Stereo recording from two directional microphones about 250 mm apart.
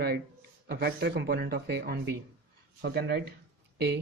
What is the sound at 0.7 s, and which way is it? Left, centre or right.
Speech, right.